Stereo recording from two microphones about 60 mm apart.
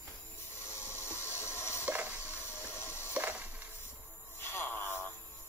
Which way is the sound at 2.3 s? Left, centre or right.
Left.